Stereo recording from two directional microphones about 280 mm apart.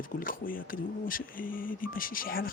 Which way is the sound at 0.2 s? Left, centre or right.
Left.